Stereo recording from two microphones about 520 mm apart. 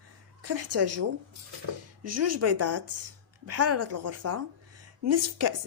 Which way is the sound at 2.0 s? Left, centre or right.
Right.